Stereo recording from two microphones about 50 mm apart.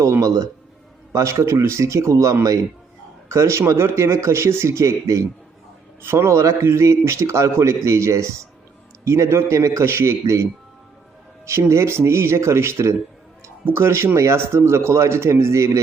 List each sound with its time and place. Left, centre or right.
0.0 s a man's voice: right
3.7 s speech: right
6.0 s speech: right
6.7 s a man's voice: right
9.0 s speech: right
11.7 s speech: right
13.7 s speech: right